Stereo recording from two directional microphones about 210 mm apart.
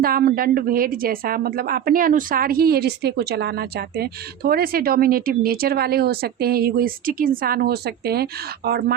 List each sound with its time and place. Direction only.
0.0 s a woman's voice: 45° right (ahead or behind)